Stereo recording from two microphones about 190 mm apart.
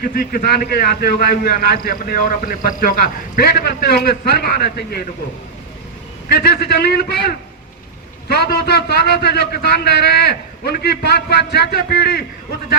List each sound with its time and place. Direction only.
0.0 s a man's voice: 50° left (ahead or behind)
6.2 s a man's voice: 60° left (ahead or behind)